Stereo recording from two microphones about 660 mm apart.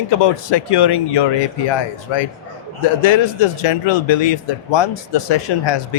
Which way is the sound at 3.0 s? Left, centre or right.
Left.